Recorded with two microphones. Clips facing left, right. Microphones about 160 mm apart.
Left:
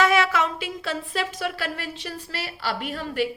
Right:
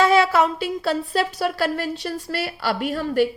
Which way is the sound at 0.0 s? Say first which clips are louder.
Right 4 dB; 30° right (ahead or behind).